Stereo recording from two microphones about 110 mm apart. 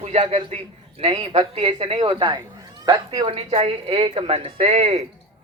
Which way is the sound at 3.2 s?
60° right (ahead or behind).